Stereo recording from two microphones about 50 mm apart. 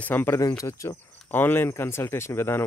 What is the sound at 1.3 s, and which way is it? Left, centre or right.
Speech, left.